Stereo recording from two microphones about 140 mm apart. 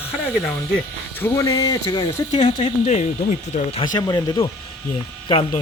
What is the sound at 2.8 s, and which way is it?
Speech, 55° left (ahead or behind).